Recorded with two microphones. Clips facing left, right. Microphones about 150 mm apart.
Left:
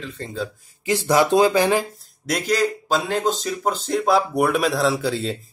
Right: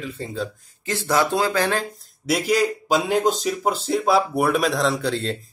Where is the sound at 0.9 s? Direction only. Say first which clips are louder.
Left 4 dB; 15° left (ahead or behind).